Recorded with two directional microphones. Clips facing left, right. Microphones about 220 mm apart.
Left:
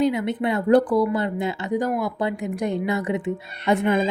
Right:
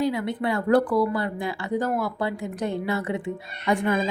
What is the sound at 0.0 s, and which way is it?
Speech, 20° left (ahead or behind).